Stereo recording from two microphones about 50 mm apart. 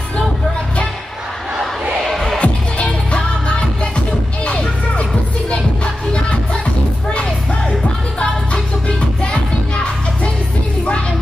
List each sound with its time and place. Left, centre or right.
2.0 s music: centre
2.3 s music: left
8.8 s music: left